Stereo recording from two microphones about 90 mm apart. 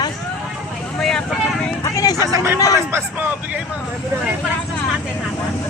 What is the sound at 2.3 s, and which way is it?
Speech, 35° right (ahead or behind).